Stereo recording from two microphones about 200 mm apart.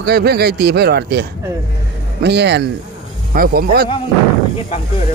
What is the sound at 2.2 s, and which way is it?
A man's voice, 55° right (ahead or behind).